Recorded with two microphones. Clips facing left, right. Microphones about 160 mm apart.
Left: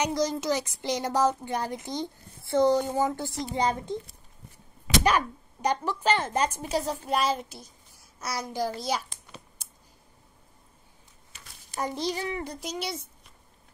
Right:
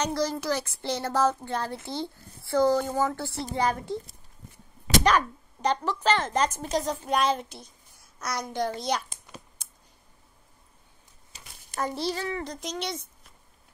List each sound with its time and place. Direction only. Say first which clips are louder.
0.0 s a woman's voice: left 1 dB; 20° left (ahead or behind)
5.0 s a child's voice: right 1 dB; 10° left (ahead or behind)
11.8 s speech: even; 15° left (ahead or behind)